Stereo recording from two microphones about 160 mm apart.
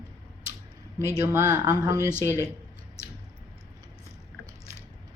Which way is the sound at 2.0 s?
15° left (ahead or behind).